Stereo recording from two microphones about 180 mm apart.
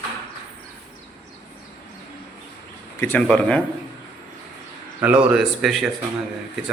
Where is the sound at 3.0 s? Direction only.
10° left (ahead or behind).